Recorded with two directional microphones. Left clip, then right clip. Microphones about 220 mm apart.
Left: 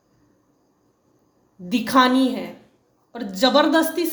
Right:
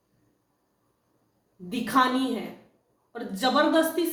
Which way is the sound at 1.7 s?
45° left (ahead or behind).